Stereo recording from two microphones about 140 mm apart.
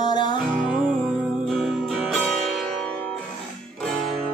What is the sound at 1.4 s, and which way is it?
Music, centre (ahead or behind).